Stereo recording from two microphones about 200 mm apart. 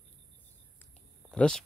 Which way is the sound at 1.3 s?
5° left (ahead or behind).